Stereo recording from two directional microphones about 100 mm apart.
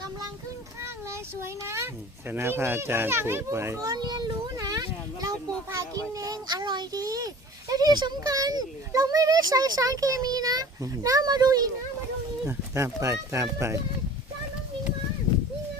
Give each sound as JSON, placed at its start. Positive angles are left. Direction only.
{"t": 1.1, "sound": "a child's voice", "side_deg": -25}
{"t": 12.5, "sound": "speech", "side_deg": -30}